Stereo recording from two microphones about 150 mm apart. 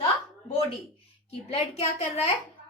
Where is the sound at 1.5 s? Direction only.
45° left (ahead or behind).